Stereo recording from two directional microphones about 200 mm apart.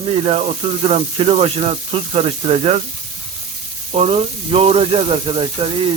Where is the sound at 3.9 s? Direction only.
30° right (ahead or behind).